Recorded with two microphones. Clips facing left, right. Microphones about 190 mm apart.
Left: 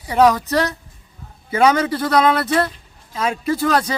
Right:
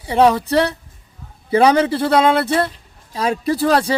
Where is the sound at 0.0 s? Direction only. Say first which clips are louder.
Right 1 dB; 30° right (ahead or behind).